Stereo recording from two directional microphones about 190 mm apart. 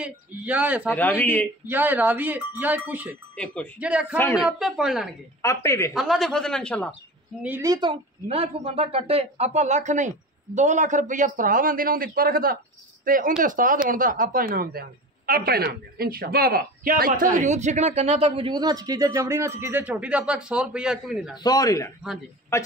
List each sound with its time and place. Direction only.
0.0 s speech: 10° right (ahead or behind)
0.9 s speech: 10° left (ahead or behind)
1.7 s a man's voice: 10° right (ahead or behind)
5.4 s speech: 15° left (ahead or behind)
5.9 s a man's voice: centre (ahead or behind)
7.4 s speech: 15° right (ahead or behind)
21.4 s a man's voice: 20° left (ahead or behind)